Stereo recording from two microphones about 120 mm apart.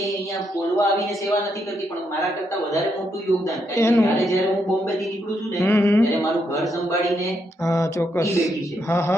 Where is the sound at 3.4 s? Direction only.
25° left (ahead or behind).